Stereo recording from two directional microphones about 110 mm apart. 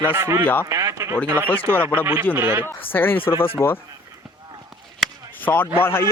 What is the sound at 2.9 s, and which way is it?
Speech, 20° left (ahead or behind).